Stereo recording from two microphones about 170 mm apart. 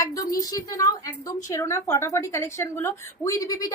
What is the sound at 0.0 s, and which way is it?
A woman's voice, 20° left (ahead or behind).